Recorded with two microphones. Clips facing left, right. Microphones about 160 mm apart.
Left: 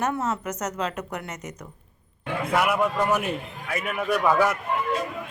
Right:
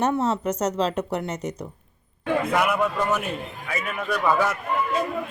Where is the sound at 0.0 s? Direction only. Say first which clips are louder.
Right 4 dB; 30° right (ahead or behind).